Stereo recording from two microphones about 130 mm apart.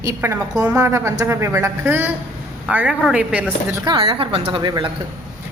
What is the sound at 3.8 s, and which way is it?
Female singing, 35° right (ahead or behind).